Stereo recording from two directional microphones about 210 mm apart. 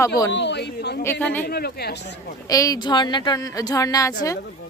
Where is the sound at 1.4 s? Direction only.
50° left (ahead or behind).